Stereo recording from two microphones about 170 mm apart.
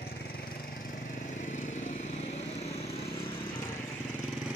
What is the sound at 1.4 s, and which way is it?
Vehicle, 45° left (ahead or behind).